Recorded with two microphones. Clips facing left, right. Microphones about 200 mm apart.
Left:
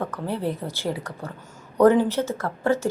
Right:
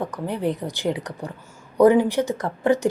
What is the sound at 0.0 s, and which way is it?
Speech, 15° right (ahead or behind).